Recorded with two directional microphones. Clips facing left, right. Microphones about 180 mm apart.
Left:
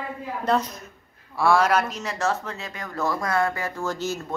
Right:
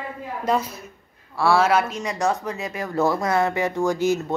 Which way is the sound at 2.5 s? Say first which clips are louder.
Right 6 dB; 20° right (ahead or behind).